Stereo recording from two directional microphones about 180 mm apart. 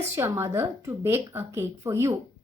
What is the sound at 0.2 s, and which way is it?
Speech, 15° right (ahead or behind).